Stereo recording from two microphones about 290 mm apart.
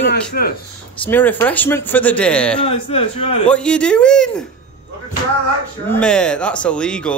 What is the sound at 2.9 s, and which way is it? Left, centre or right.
Speech, centre.